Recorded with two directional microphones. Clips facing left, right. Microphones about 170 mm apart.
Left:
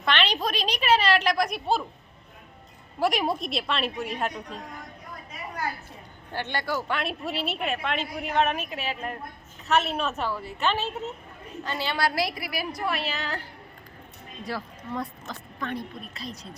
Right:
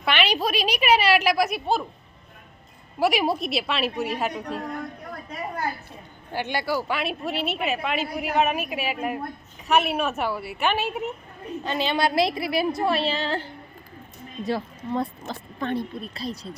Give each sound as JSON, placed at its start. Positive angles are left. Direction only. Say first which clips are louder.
{"t": 0.0, "sound": "a sound", "louder": "right 2 dB", "side_deg": -10}
{"t": 3.0, "sound": "a woman's voice", "louder": "right 3 dB", "side_deg": -5}
{"t": 4.4, "sound": "speech", "louder": "right 8 dB", "side_deg": -70}
{"t": 6.3, "sound": "a woman's voice", "louder": "right 3 dB", "side_deg": -10}